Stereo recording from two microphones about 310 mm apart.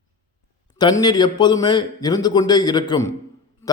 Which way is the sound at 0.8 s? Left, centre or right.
Centre.